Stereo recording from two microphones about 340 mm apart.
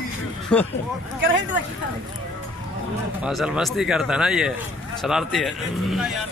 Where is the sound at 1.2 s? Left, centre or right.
Right.